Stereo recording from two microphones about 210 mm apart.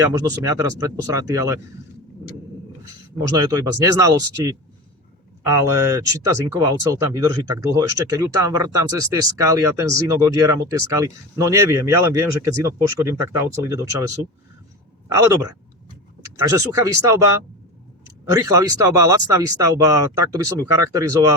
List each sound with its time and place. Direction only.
0.0 s speech: 15° right (ahead or behind)
3.2 s speech: 15° right (ahead or behind)
15.1 s speech: 15° right (ahead or behind)
18.3 s speech: 15° right (ahead or behind)